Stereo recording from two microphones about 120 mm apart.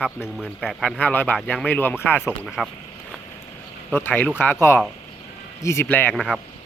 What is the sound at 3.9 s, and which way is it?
Speech, 15° left (ahead or behind).